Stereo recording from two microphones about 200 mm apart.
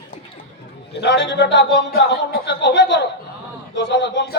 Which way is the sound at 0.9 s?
55° left (ahead or behind).